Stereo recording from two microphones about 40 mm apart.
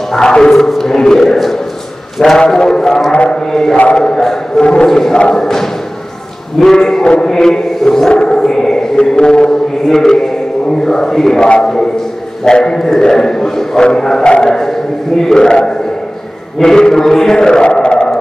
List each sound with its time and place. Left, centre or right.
0.1 s speech: centre
0.5 s a sound: centre
2.2 s a man's voice: centre
2.5 s a sound: centre
3.1 s chant: left
3.3 s a man's voice: centre
8.1 s chant: left
10.9 s a man's voice: centre
11.4 s a man's voice: left